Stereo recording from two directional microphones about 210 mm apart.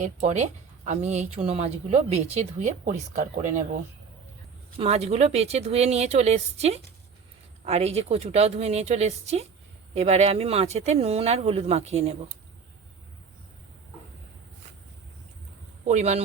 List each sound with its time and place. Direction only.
0.0 s speech: 35° right (ahead or behind)
4.8 s speech: 30° right (ahead or behind)
15.9 s speech: 30° right (ahead or behind)